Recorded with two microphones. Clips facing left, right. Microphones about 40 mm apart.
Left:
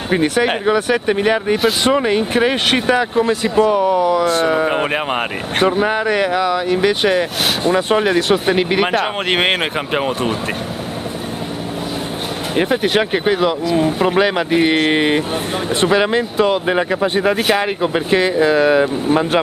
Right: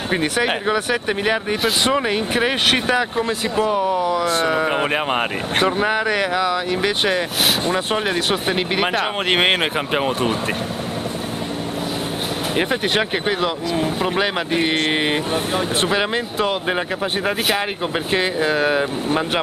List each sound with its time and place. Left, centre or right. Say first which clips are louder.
0.1 s speech: left 4 dB; centre
12.5 s speech: left 5 dB; centre